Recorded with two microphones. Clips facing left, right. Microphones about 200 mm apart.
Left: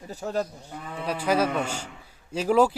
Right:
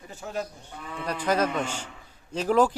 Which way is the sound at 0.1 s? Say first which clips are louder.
Left 5 dB; 35° left (ahead or behind).